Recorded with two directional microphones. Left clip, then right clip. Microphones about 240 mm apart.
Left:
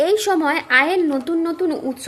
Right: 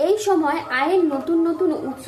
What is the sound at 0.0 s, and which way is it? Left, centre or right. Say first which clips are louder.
Speech: left 1 dB; left.